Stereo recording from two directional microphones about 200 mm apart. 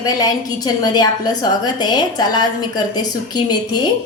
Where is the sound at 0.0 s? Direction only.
20° left (ahead or behind).